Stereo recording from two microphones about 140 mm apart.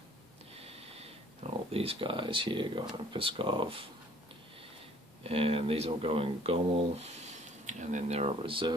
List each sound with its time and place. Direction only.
0.6 s a sound: 45° right (ahead or behind)
3.1 s speech: 40° right (ahead or behind)
5.2 s speech: 45° right (ahead or behind)